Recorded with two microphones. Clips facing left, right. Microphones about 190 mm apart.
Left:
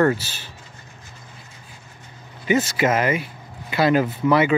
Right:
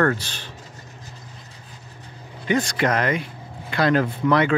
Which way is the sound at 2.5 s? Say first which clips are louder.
Left 2 dB; 5° left (ahead or behind).